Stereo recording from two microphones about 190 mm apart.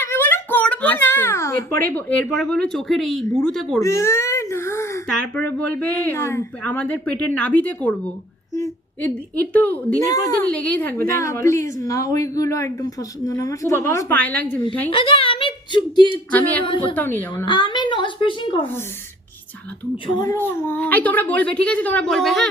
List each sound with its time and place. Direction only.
0.0 s a child's voice: 10° left (ahead or behind)
3.8 s baby cry: 15° left (ahead or behind)
5.6 s a woman's voice: 10° left (ahead or behind)
14.8 s speech: 30° left (ahead or behind)
16.3 s a woman's voice: 10° left (ahead or behind)
17.4 s a child's voice: 25° left (ahead or behind)
20.1 s a woman's voice: 15° left (ahead or behind)